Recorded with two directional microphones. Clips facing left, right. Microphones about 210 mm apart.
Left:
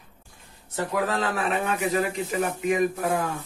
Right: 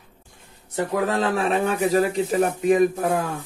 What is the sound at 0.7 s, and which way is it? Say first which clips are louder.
Speech: right 4 dB; 20° right (ahead or behind).